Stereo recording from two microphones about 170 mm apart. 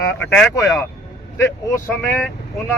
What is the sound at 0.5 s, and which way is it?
Speech, 15° left (ahead or behind).